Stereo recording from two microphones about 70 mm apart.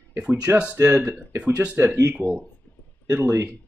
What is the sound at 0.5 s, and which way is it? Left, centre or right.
Speech, right.